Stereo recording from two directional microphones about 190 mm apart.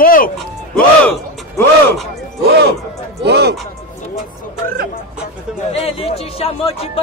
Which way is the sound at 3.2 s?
60° right (ahead or behind).